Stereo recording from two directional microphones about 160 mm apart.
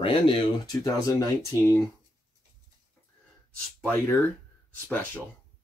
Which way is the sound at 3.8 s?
15° left (ahead or behind).